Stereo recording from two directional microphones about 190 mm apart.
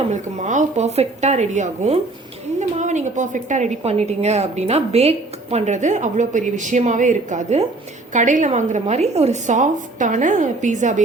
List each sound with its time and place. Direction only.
0.1 s a woman's voice: 40° right (ahead or behind)